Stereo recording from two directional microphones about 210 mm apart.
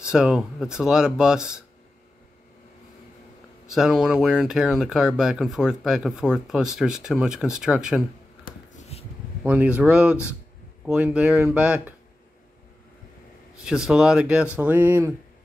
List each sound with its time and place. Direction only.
0.0 s speech: 5° right (ahead or behind)
3.6 s speech: 5° right (ahead or behind)
8.7 s a sound: 30° left (ahead or behind)
9.4 s speech: 5° right (ahead or behind)
13.6 s speech: 5° right (ahead or behind)